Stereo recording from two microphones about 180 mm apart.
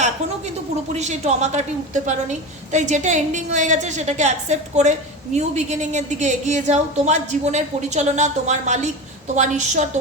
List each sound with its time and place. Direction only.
0.9 s a woman's voice: 40° right (ahead or behind)